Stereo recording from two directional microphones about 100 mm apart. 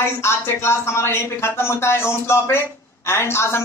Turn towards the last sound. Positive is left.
turn(degrees=25)  # may be behind; listen again after turning